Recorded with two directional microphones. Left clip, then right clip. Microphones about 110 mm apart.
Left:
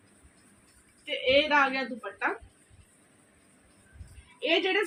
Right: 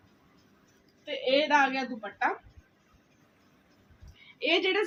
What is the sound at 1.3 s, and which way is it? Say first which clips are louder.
Speech: even; 50° right (ahead or behind).